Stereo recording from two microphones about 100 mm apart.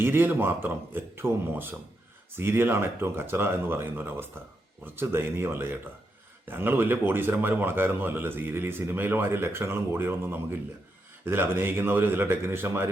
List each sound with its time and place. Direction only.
0.0 s speech: 20° right (ahead or behind)